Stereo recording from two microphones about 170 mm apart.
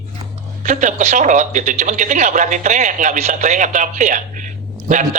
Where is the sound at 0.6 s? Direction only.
45° right (ahead or behind).